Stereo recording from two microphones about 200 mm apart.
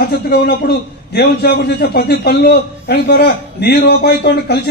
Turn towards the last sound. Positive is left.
turn(degrees=50)  # may be behind; listen again after turning